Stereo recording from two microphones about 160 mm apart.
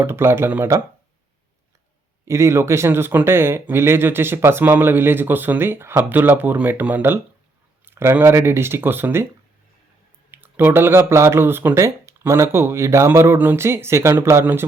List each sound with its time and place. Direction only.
0.0 s speech: 15° right (ahead or behind)
2.2 s speech: 20° right (ahead or behind)
10.3 s speech: 15° right (ahead or behind)